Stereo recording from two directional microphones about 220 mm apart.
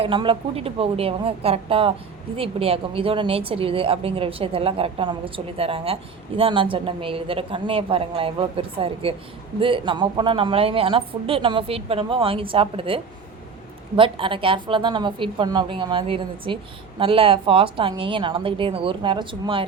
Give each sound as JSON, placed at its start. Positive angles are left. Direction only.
{"t": 0.0, "sound": "a woman's voice", "side_deg": -25}